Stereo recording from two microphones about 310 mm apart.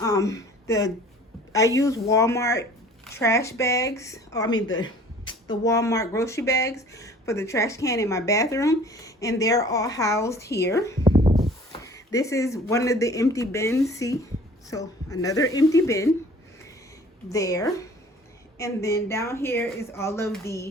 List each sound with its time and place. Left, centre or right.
0.0 s speech: centre
11.0 s a sound: centre
11.7 s speech: centre
17.3 s speech: centre